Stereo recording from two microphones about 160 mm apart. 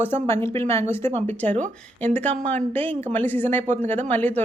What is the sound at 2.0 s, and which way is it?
Speech, 10° left (ahead or behind).